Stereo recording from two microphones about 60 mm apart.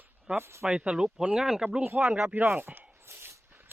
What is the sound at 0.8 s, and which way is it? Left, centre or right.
Speech, centre.